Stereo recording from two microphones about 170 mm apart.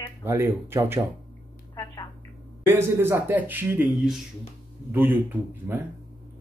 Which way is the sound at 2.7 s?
15° right (ahead or behind).